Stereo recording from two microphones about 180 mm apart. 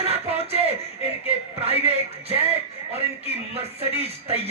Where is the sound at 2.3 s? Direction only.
35° right (ahead or behind).